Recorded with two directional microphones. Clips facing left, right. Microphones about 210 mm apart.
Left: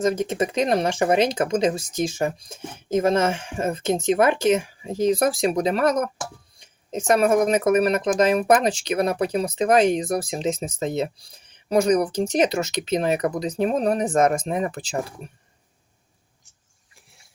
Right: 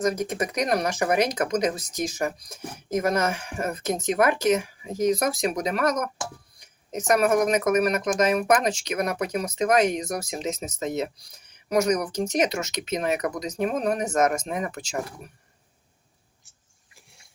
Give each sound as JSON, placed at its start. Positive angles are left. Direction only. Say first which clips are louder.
{"t": 0.0, "sound": "speech", "louder": "left 3 dB", "side_deg": 25}